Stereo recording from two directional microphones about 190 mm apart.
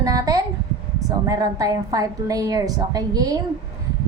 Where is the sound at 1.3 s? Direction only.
20° right (ahead or behind).